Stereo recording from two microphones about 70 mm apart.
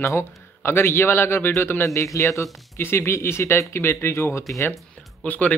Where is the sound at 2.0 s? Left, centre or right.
Left.